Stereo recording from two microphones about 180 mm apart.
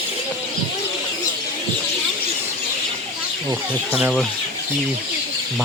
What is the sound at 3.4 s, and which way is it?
Speech, 15° right (ahead or behind).